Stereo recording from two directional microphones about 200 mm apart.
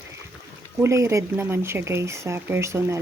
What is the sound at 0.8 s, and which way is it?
Speech, 15° right (ahead or behind).